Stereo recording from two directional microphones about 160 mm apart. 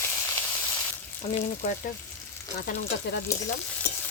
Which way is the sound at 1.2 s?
35° left (ahead or behind).